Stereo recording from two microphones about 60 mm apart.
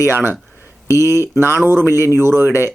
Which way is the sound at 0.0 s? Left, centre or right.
Right.